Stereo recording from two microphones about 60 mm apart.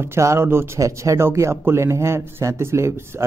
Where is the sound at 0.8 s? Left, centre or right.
Right.